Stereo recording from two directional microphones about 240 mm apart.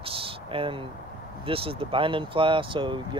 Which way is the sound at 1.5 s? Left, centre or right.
Right.